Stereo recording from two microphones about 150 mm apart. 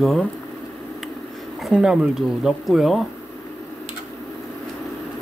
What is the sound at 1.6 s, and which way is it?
Speech, 5° right (ahead or behind).